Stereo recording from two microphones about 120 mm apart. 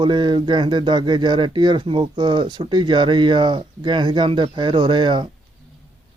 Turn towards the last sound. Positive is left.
turn(degrees=-40)  # may be behind; listen again after turning